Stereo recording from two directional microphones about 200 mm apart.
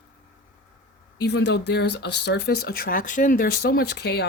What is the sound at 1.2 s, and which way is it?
Speech, 55° left (ahead or behind).